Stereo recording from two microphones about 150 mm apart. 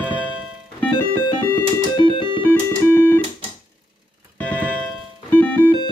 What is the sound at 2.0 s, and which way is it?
Music, 35° left (ahead or behind).